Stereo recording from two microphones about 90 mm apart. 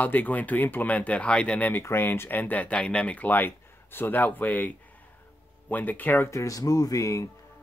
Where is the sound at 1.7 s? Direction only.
25° left (ahead or behind).